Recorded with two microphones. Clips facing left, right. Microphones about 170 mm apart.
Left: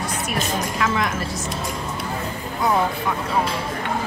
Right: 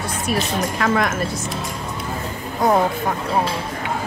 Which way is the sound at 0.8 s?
45° right (ahead or behind).